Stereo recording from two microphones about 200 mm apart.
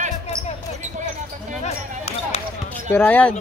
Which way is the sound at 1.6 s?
30° left (ahead or behind).